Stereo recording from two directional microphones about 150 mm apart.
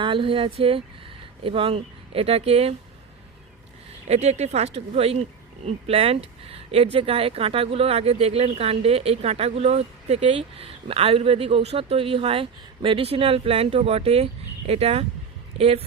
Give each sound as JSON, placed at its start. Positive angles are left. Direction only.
{"t": 0.0, "sound": "speech", "side_deg": -35}
{"t": 4.1, "sound": "a man's voice", "side_deg": -45}